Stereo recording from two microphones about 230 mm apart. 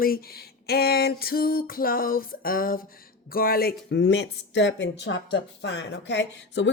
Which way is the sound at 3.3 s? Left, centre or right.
Left.